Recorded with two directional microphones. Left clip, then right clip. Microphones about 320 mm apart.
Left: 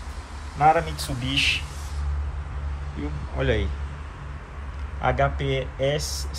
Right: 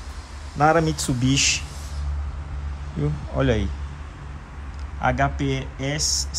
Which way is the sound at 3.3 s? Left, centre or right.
Centre.